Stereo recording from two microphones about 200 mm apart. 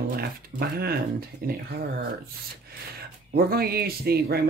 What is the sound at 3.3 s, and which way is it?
Speech, 50° right (ahead or behind).